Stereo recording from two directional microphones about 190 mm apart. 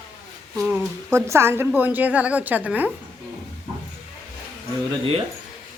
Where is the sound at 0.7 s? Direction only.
15° right (ahead or behind).